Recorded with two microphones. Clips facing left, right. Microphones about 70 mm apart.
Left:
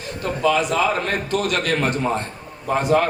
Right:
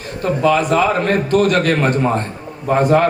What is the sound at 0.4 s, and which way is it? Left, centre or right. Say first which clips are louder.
A man's voice: right 4 dB; right.